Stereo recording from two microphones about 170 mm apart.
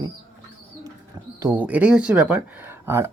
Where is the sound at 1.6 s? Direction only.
5° right (ahead or behind).